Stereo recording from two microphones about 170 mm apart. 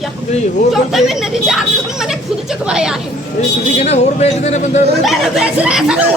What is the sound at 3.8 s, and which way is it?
Speech, 40° left (ahead or behind).